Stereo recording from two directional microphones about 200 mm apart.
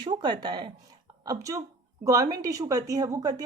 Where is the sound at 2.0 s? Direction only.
15° right (ahead or behind).